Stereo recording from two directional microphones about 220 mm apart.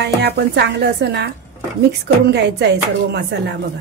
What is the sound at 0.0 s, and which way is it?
Speech, 50° right (ahead or behind).